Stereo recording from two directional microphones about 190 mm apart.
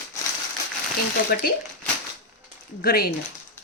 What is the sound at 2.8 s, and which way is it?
Speech, 50° left (ahead or behind).